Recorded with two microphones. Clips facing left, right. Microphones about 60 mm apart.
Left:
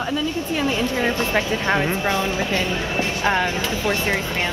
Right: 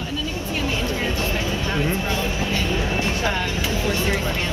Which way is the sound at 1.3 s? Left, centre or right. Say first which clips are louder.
Left 4 dB; left.